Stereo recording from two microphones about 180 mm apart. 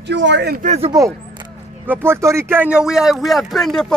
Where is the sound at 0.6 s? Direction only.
40° right (ahead or behind).